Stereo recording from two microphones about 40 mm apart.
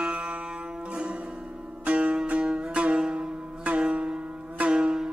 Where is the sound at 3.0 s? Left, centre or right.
Centre.